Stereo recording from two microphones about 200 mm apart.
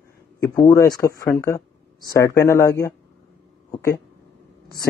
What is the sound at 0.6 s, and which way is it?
Speech, 15° left (ahead or behind).